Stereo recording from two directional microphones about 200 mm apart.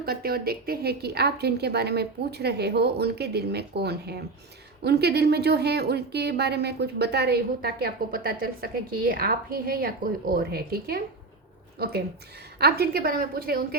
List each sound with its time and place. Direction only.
0.0 s a woman's voice: 50° right (ahead or behind)